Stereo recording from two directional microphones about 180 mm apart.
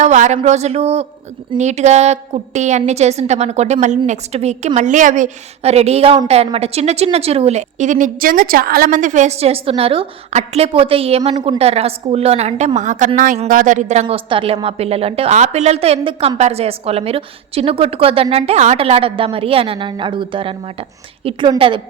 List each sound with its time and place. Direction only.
0.0 s a woman's voice: 40° right (ahead or behind)